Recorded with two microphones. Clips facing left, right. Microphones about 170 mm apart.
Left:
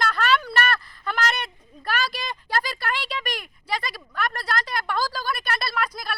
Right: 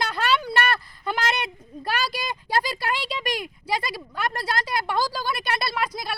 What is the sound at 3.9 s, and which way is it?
Speech, 30° right (ahead or behind).